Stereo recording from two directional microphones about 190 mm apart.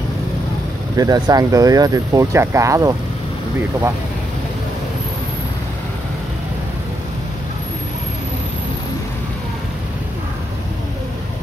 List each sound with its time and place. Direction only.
0.9 s speech: 20° right (ahead or behind)